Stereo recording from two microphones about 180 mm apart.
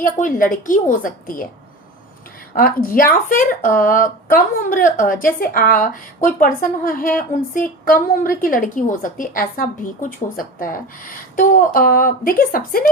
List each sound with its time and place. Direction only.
0.0 s a woman's voice: 50° left (ahead or behind)
2.6 s a woman's voice: 55° left (ahead or behind)